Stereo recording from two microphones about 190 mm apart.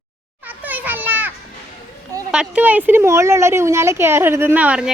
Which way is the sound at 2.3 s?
5° right (ahead or behind).